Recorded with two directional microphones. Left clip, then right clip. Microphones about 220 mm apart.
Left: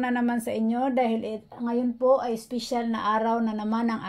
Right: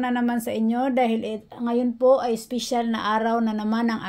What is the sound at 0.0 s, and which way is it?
A woman's voice, 5° right (ahead or behind).